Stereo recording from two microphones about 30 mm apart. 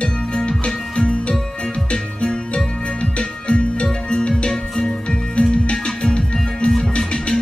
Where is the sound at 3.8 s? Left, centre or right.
Left.